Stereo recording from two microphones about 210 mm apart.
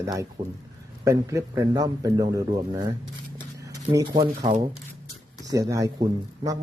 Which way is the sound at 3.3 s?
15° right (ahead or behind).